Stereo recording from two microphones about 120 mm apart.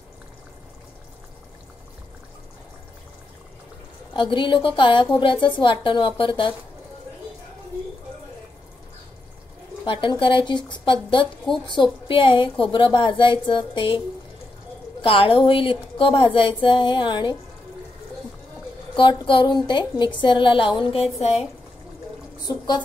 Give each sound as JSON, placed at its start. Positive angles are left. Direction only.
{"t": 4.1, "sound": "speech", "side_deg": 45}
{"t": 9.8, "sound": "speech", "side_deg": 45}
{"t": 18.9, "sound": "speech", "side_deg": 40}